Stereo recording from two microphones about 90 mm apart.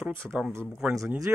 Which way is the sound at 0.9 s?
40° right (ahead or behind).